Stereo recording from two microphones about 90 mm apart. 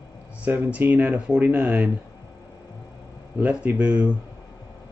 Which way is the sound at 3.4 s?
15° right (ahead or behind).